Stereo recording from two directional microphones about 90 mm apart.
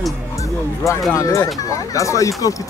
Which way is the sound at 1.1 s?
40° left (ahead or behind).